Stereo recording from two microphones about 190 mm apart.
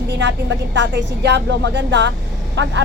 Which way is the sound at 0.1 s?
70° right (ahead or behind).